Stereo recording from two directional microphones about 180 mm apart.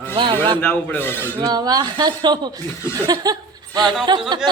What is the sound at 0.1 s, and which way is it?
Speech, 25° right (ahead or behind).